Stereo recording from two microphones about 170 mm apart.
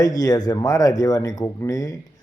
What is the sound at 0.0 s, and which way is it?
Speech, 20° left (ahead or behind).